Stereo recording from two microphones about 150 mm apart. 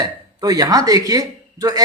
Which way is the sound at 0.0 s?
25° right (ahead or behind).